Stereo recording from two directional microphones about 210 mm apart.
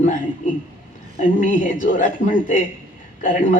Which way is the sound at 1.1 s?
35° left (ahead or behind).